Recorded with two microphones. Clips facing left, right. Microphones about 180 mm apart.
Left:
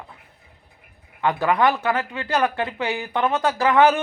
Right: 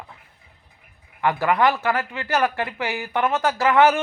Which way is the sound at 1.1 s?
15° left (ahead or behind).